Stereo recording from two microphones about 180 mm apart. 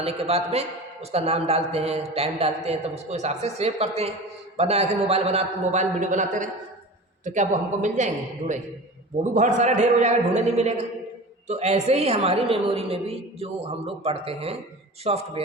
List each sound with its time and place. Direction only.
0.0 s a woman's voice: 35° right (ahead or behind)